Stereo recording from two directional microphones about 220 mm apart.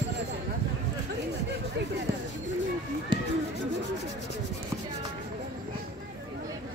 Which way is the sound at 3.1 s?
20° right (ahead or behind).